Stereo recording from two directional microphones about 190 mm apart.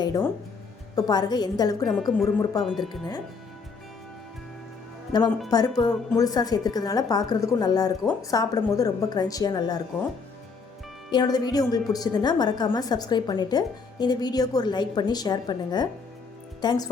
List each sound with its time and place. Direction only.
0.0 s music: 20° left (ahead or behind)
0.9 s a woman's voice: 20° left (ahead or behind)
1.8 s a woman's voice: centre (ahead or behind)
5.5 s a woman's voice: 20° left (ahead or behind)
11.1 s a woman's voice: 20° left (ahead or behind)